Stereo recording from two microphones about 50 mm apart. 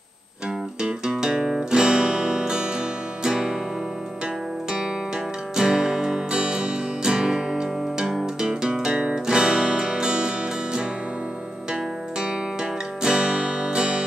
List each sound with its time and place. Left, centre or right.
0.8 s guitar: centre
3.3 s music: centre
5.6 s music: centre
8.1 s music: centre
8.5 s guitar: centre
13.0 s music: centre